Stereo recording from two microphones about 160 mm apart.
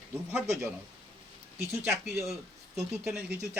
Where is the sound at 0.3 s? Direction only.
10° right (ahead or behind).